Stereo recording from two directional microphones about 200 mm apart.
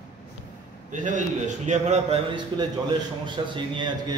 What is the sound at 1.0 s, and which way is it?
A man's voice, 40° right (ahead or behind).